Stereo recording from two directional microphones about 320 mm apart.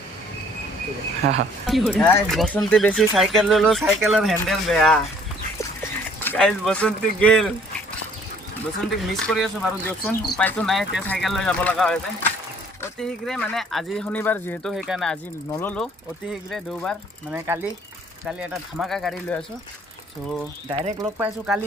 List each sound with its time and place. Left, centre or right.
1.6 s speech: centre
6.2 s speech: centre
9.0 s speech: centre
20.7 s speech: centre
21.2 s speech: centre